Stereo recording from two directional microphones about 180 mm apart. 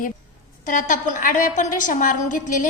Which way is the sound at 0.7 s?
45° left (ahead or behind).